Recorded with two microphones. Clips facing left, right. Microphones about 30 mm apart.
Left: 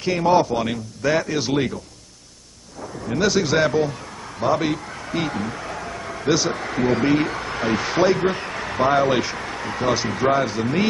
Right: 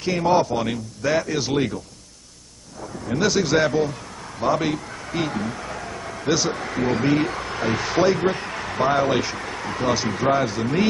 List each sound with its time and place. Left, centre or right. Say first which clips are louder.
0.0 s a man's voice: left 2 dB; centre
2.8 s speech: left 1 dB; centre